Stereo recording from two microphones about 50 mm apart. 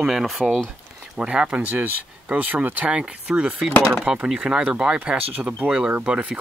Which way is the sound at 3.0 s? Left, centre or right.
Centre.